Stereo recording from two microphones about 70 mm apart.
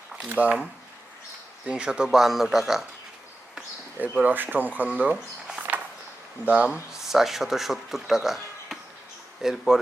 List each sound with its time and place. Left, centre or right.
0.3 s speech: right
1.6 s speech: centre
4.2 s speech: right
6.9 s speech: centre